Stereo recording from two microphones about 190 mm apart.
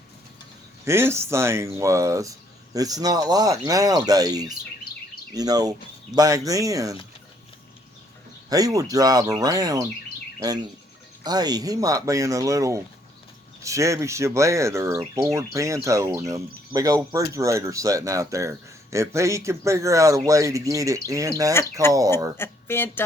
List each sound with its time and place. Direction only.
0.9 s speech: 15° right (ahead or behind)
8.4 s speech: 20° right (ahead or behind)
21.5 s speech: 15° left (ahead or behind)